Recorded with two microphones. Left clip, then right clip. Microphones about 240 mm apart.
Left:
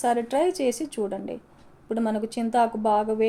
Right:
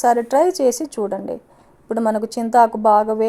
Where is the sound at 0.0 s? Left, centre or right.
Right.